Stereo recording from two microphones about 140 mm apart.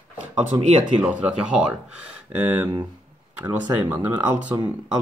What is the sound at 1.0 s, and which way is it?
Speech, 5° right (ahead or behind).